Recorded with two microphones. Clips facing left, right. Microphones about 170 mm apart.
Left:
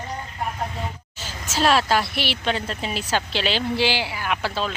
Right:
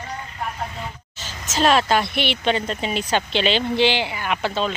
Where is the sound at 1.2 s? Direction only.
10° left (ahead or behind).